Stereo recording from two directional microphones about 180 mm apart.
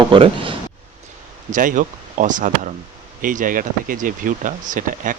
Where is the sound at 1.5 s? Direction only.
45° right (ahead or behind).